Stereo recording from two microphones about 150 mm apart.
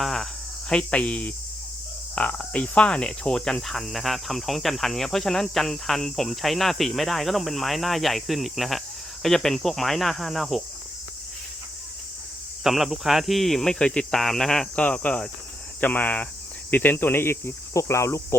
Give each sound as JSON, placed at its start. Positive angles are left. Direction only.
{"t": 0.0, "sound": "cricket", "side_deg": 0}
{"t": 0.7, "sound": "speech", "side_deg": 10}
{"t": 2.1, "sound": "cricket", "side_deg": 10}
{"t": 12.6, "sound": "cricket", "side_deg": 0}
{"t": 15.8, "sound": "speech", "side_deg": 10}